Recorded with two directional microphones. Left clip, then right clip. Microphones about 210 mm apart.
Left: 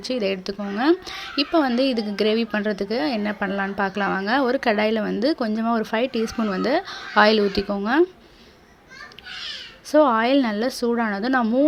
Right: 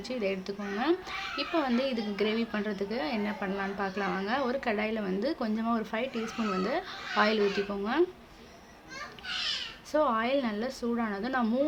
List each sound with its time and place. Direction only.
0.0 s a woman's voice: 35° left (ahead or behind)
9.9 s a woman's voice: 35° left (ahead or behind)